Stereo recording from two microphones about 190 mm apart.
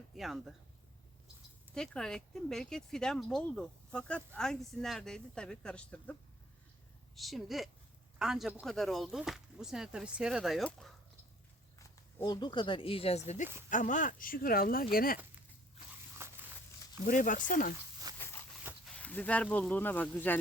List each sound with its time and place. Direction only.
0.1 s speech: centre (ahead or behind)
1.7 s speech: 5° left (ahead or behind)
7.2 s speech: centre (ahead or behind)
11.8 s speech: 20° left (ahead or behind); by 15.2 s 50° left (ahead or behind)
16.2 s a sound: 15° right (ahead or behind)
17.1 s speech: 45° left (ahead or behind)
18.1 s a sound: 20° right (ahead or behind)
18.9 s speech: 5° left (ahead or behind)